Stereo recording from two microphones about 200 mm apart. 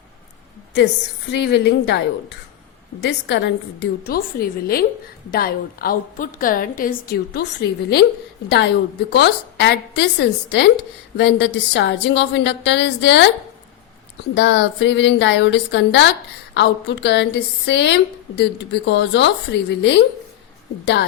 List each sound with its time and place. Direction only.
1.3 s a woman's voice: 60° left (ahead or behind)
14.3 s a woman's voice: 60° left (ahead or behind)